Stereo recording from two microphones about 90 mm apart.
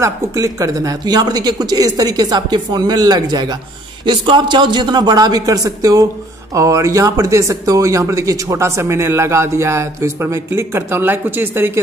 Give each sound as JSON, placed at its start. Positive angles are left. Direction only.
{"t": 0.0, "sound": "speech", "side_deg": -40}
{"t": 4.0, "sound": "speech", "side_deg": -60}